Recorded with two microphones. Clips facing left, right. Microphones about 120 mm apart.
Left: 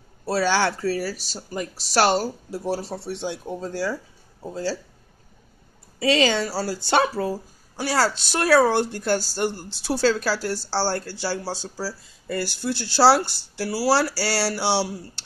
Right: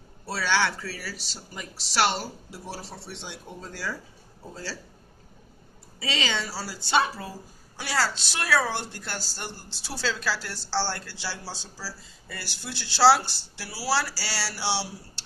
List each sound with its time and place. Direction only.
0.3 s speech: 40° left (ahead or behind)
5.9 s speech: 45° left (ahead or behind)